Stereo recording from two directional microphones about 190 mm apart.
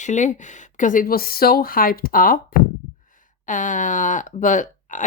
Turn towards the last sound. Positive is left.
turn(degrees=40)  # may be behind; listen again after turning